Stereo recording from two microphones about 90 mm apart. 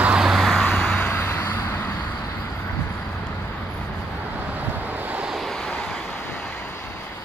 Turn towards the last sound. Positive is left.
turn(degrees=0)  # may be behind; listen again after turning